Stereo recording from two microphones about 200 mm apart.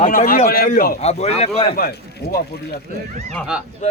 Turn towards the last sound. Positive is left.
turn(degrees=-5)  # may be behind; listen again after turning